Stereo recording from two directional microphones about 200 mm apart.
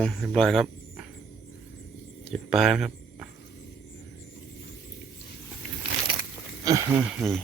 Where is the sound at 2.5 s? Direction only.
Centre (ahead or behind).